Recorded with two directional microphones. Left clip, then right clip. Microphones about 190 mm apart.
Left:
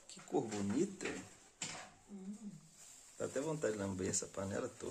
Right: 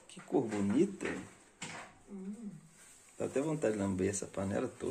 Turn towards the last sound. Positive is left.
turn(degrees=-10)  # may be behind; listen again after turning